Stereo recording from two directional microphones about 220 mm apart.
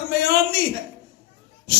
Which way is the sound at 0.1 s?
45° left (ahead or behind).